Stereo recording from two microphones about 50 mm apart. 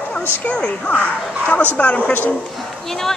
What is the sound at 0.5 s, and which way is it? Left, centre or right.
Speech, left.